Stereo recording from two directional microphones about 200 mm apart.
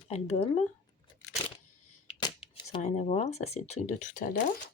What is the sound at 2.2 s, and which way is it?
Speech, 25° left (ahead or behind).